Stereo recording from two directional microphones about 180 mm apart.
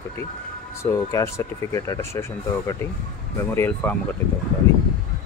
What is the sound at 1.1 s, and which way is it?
Speech, 20° left (ahead or behind).